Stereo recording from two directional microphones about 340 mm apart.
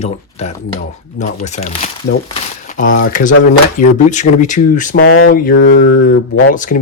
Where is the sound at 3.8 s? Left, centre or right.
Left.